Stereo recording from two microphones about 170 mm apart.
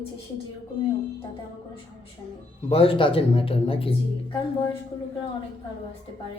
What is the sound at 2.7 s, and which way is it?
A man's voice, 35° left (ahead or behind).